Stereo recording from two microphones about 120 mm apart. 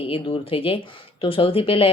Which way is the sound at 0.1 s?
50° left (ahead or behind).